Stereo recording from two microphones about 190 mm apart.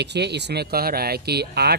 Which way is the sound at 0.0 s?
60° right (ahead or behind).